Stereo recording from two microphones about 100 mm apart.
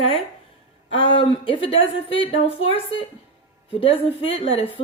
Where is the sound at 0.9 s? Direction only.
65° left (ahead or behind).